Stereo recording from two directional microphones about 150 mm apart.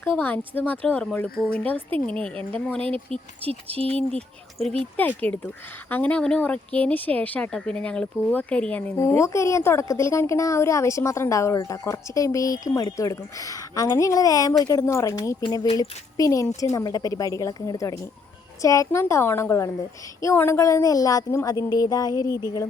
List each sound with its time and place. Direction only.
0.0 s speech: 15° left (ahead or behind)
3.4 s speech: 40° right (ahead or behind)
4.6 s speech: centre (ahead or behind)
9.0 s speech: 20° left (ahead or behind)